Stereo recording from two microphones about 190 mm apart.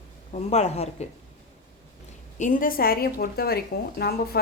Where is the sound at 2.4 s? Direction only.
45° left (ahead or behind).